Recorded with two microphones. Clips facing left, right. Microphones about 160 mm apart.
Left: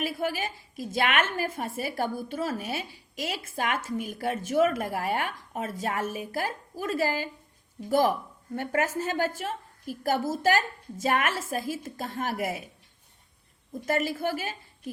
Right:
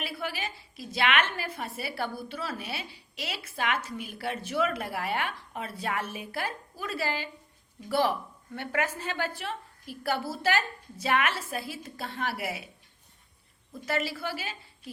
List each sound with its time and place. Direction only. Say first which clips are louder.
0.0 s a woman's voice: left 5 dB; 45° left (ahead or behind)
13.8 s a woman's voice: left 4 dB; 50° left (ahead or behind)